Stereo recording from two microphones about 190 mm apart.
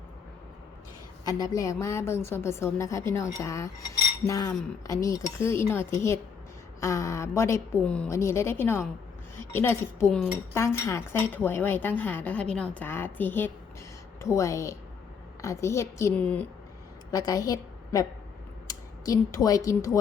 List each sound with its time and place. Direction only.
1.2 s a woman's voice: 20° left (ahead or behind)
17.1 s a woman's voice: 20° left (ahead or behind)